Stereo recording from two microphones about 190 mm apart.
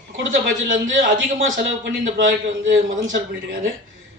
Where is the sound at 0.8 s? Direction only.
85° right.